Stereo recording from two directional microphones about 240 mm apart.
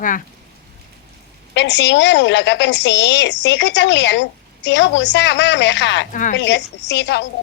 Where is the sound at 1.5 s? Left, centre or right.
Left.